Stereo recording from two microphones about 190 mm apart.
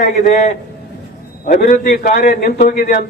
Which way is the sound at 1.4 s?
45° left (ahead or behind).